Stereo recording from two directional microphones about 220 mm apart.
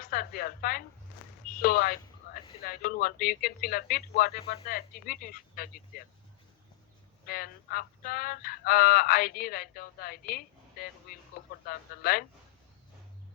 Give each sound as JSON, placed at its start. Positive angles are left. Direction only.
{"t": 0.0, "sound": "speech", "side_deg": 40}
{"t": 7.3, "sound": "speech", "side_deg": 40}